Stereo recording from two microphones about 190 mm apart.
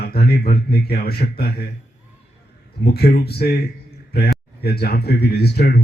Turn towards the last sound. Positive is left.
turn(degrees=55)  # may be behind; listen again after turning